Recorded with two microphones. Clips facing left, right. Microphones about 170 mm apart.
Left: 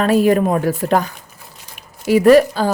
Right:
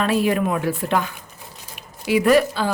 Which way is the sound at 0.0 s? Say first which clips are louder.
Left 6 dB; 45° left (ahead or behind).